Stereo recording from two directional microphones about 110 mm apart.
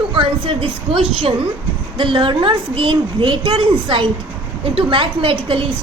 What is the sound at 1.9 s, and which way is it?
A woman's voice, 50° right (ahead or behind).